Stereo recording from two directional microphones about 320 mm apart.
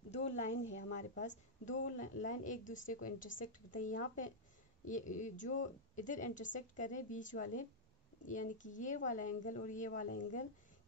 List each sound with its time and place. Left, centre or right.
0.1 s a woman's voice: left